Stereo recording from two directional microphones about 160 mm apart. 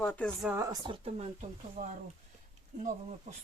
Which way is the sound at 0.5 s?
20° right (ahead or behind).